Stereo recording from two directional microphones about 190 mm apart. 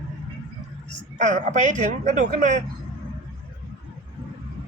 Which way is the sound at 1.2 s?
40° right (ahead or behind).